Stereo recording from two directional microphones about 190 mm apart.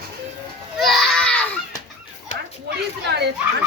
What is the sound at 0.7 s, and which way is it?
Children playing, centre (ahead or behind).